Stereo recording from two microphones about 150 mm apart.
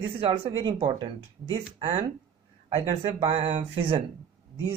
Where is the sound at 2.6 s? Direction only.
45° right (ahead or behind).